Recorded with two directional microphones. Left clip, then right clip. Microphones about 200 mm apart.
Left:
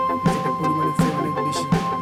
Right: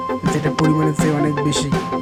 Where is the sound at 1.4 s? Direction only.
35° right (ahead or behind).